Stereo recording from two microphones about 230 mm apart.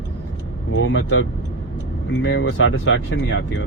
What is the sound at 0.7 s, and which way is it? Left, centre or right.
Speech, left.